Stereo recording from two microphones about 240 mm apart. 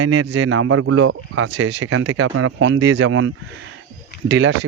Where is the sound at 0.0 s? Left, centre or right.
Right.